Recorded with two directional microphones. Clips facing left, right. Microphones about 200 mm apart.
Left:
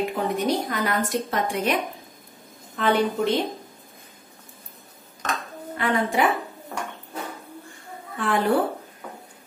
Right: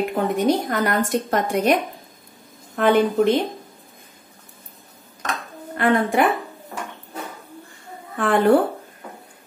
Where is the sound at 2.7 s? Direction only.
55° right (ahead or behind).